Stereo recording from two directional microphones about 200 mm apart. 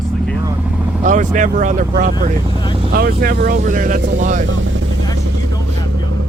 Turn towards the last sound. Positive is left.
turn(degrees=-40)  # may be behind; listen again after turning